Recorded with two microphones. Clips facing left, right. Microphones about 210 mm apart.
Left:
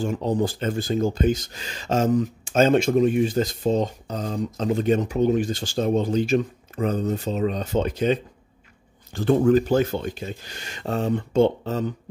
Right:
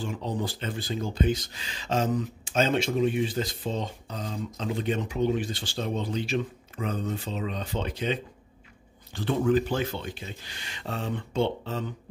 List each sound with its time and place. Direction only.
0.0 s speech: 45° left (ahead or behind)